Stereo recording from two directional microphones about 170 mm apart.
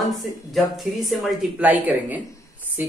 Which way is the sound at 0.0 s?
Centre (ahead or behind).